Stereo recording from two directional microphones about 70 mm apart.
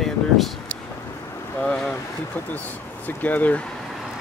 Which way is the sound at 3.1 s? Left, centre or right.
Left.